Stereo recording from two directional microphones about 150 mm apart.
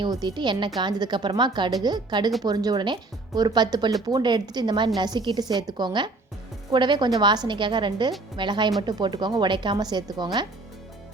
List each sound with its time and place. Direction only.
0.0 s a woman's voice: 30° right (ahead or behind)